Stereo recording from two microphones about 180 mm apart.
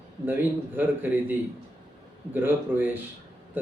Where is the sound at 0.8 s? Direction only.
10° right (ahead or behind).